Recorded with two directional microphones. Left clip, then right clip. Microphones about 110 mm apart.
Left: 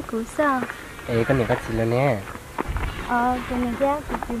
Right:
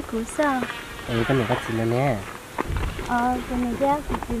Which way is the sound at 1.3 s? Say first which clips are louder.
Right 1 dB; 20° left (ahead or behind).